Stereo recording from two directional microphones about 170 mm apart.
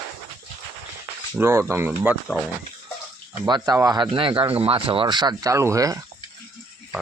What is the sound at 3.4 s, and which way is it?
Speech, 25° right (ahead or behind).